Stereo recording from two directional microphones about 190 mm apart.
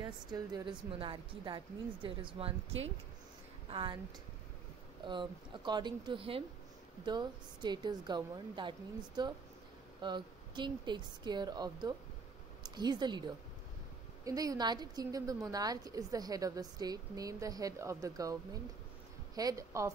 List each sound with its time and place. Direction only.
0.0 s a woman's voice: 20° right (ahead or behind)
5.0 s a woman's voice: 25° right (ahead or behind)
14.2 s a woman's voice: 20° right (ahead or behind)